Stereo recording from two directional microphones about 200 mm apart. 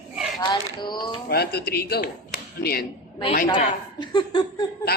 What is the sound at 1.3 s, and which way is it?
Speech, 55° left (ahead or behind).